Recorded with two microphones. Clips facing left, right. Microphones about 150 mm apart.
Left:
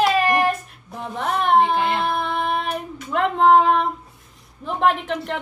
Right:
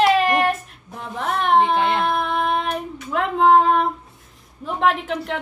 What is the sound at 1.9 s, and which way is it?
Child singing, centre (ahead or behind).